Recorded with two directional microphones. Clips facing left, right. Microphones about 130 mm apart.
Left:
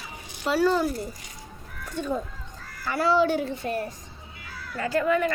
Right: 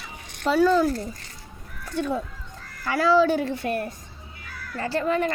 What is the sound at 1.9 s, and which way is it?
Speech, 75° right (ahead or behind).